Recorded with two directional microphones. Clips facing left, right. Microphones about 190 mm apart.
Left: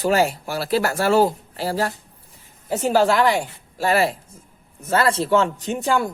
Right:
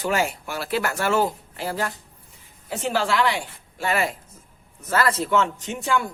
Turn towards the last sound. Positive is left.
turn(degrees=35)  # may be behind; listen again after turning